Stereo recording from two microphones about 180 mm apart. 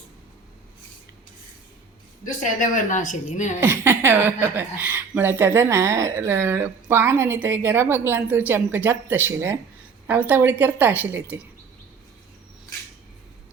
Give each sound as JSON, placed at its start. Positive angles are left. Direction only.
{"t": 2.2, "sound": "a woman's voice", "side_deg": 45}
{"t": 3.6, "sound": "a woman's voice", "side_deg": -15}